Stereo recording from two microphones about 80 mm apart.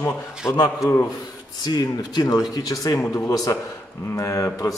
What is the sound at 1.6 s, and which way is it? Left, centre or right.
Speech, left.